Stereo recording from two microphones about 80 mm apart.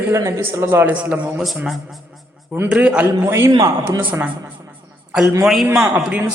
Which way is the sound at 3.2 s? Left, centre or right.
Right.